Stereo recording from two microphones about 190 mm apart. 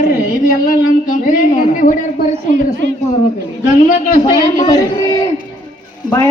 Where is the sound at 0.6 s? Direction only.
45° left (ahead or behind).